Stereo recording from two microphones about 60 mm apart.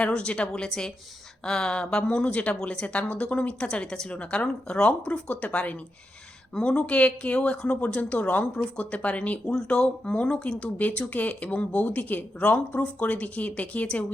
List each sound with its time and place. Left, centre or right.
0.0 s speech: centre